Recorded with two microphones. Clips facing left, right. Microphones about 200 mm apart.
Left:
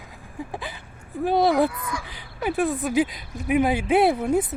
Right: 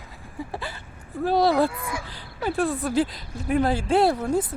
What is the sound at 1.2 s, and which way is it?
Speech, 20° left (ahead or behind).